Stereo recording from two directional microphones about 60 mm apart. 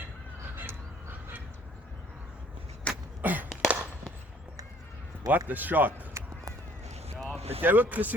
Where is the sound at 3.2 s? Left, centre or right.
Right.